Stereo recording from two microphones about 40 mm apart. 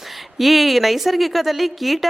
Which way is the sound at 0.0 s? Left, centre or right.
Centre.